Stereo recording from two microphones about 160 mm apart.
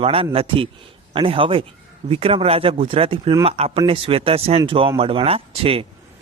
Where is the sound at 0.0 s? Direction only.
35° right (ahead or behind).